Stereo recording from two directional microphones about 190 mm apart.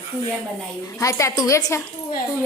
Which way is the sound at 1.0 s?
15° left (ahead or behind).